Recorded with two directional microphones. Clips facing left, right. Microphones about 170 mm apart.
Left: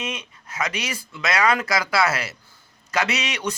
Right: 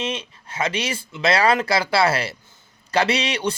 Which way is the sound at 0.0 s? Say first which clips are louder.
Right 4 dB; 30° right (ahead or behind).